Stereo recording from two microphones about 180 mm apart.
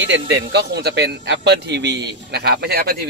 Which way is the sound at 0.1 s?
70° right (ahead or behind).